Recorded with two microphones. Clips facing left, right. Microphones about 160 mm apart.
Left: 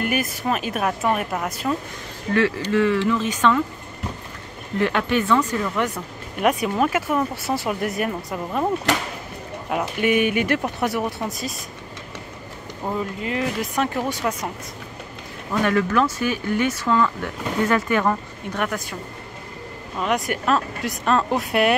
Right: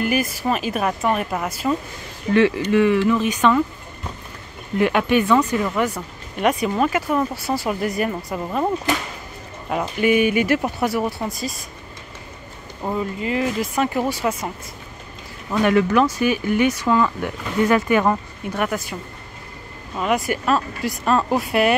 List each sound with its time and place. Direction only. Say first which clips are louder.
0.0 s speech: right 2 dB; centre (ahead or behind)
2.3 s speech: right 4 dB; 20° right (ahead or behind)
4.7 s speech: right 3 dB; 10° right (ahead or behind)
6.4 s speech: right 1 dB; centre (ahead or behind)
9.7 s speech: right 2 dB; centre (ahead or behind)
12.8 s speech: right 2 dB; centre (ahead or behind)
15.6 s speech: right 3 dB; 15° right (ahead or behind)
20.0 s speech: right 2 dB; 5° right (ahead or behind)